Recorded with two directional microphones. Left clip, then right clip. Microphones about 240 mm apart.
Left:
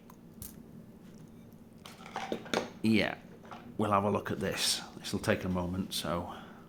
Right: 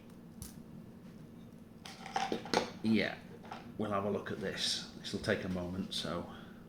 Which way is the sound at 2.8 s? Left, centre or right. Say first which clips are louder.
Left 4 dB; left.